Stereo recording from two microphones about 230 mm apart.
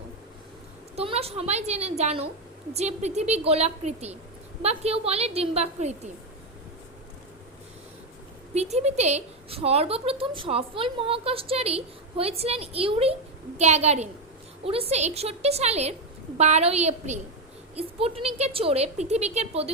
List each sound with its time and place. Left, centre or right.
0.9 s a woman's voice: right
8.5 s a woman's voice: right